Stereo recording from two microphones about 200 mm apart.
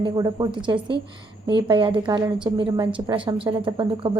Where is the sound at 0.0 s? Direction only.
20° right (ahead or behind).